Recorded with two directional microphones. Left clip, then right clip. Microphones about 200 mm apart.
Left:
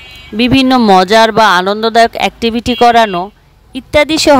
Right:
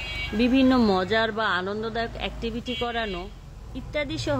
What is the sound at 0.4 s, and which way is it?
Speech, 50° left (ahead or behind).